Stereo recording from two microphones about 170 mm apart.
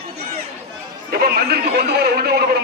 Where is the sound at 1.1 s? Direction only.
65° right (ahead or behind).